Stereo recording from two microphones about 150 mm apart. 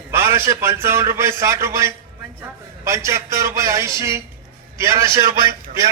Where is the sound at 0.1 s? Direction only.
15° right (ahead or behind).